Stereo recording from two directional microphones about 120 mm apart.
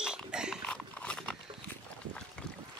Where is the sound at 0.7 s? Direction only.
10° left (ahead or behind).